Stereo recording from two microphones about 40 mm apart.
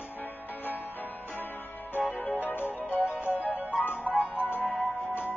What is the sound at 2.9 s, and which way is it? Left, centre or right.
Music, right.